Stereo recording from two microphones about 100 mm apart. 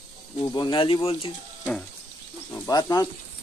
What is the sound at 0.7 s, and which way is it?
Speech, 65° left (ahead or behind).